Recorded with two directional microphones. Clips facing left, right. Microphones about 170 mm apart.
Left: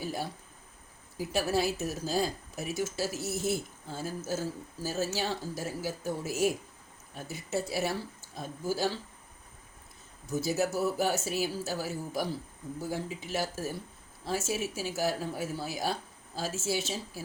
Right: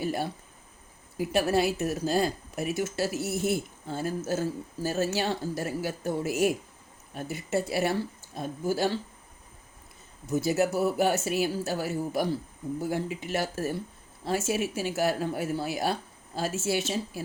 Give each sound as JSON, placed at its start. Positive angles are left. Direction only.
{"t": 0.0, "sound": "a sound", "side_deg": -60}
{"t": 1.2, "sound": "a woman's voice", "side_deg": -60}
{"t": 10.4, "sound": "a woman's voice", "side_deg": -60}